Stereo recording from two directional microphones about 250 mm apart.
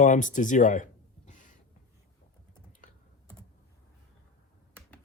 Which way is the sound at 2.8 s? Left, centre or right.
Left.